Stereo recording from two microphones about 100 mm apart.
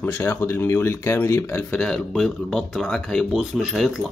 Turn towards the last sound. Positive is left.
turn(degrees=0)  # may be behind; listen again after turning